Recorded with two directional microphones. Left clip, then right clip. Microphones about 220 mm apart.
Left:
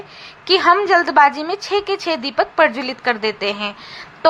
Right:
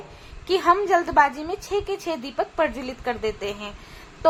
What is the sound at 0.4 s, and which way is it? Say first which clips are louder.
A woman's voice: left 6 dB; 15° left (ahead or behind).